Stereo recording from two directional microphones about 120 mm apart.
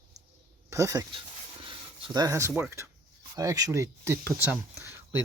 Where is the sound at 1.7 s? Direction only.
35° right (ahead or behind).